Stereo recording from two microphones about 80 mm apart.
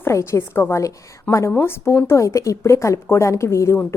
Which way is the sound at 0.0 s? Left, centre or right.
Left.